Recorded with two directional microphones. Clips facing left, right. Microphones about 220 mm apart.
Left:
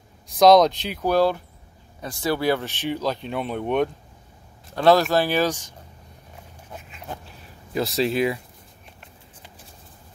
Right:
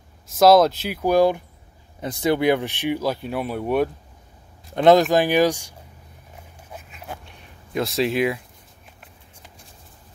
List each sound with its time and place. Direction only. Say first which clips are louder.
0.3 s speech: even; 5° right (ahead or behind)
4.7 s speech: right 3 dB; 20° right (ahead or behind)
6.7 s a sound: even; 5° right (ahead or behind)